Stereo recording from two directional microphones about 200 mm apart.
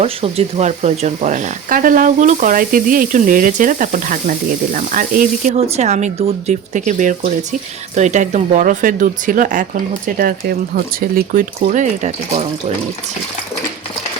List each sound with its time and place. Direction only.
0.0 s speech: 30° right (ahead or behind)